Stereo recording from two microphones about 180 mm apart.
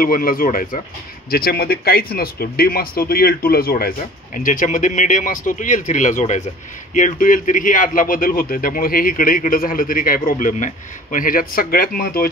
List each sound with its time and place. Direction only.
0.0 s speech: 50° left (ahead or behind)